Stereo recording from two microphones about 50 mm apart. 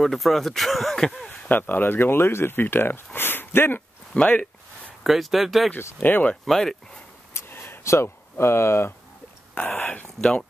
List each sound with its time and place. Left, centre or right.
0.0 s speech: centre
1.5 s speech: left
4.1 s speech: left
5.0 s speech: centre
6.0 s speech: left
6.4 s speech: centre
7.3 s a sound: left
7.8 s speech: left
9.8 s speech: left